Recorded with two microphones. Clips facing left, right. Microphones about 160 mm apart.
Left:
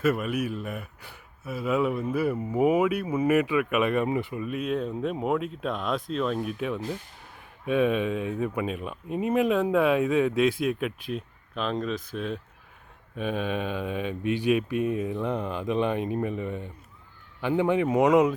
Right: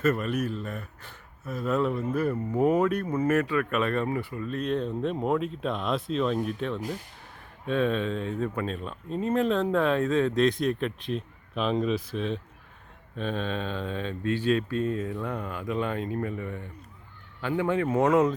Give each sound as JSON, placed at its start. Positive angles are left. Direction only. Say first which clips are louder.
{"t": 0.0, "sound": "a man's voice", "louder": "even", "side_deg": 10}